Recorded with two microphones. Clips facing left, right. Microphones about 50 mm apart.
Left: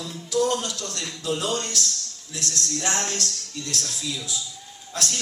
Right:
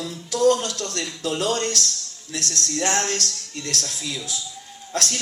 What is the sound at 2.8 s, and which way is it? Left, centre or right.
Music, right.